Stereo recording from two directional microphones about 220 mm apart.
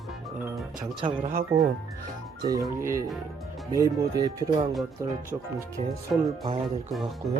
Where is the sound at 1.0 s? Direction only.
35° right (ahead or behind).